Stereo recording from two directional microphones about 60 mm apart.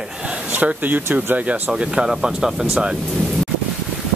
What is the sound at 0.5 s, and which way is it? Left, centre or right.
Speech, right.